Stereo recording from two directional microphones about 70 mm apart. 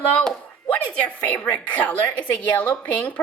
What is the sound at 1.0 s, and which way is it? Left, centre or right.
A woman's voice, centre.